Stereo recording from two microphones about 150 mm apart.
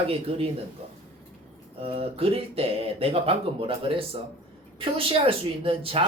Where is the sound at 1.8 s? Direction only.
40° right (ahead or behind).